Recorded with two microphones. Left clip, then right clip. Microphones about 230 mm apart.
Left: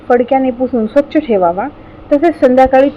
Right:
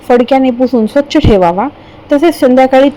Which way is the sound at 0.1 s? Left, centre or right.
Right.